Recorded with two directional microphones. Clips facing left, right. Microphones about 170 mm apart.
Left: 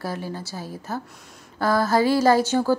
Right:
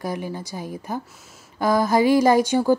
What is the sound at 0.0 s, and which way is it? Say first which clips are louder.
A woman's voice: right 2 dB; 15° right (ahead or behind).